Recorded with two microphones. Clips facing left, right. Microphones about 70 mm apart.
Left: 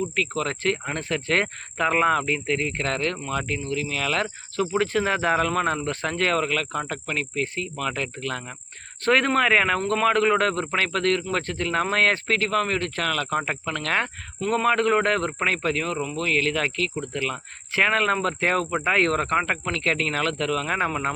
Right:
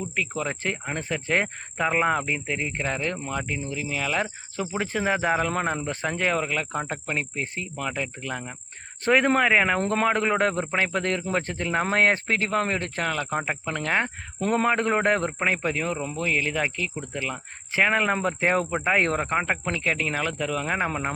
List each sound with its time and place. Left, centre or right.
0.2 s speech: centre
9.8 s speech: right; by 21.1 s centre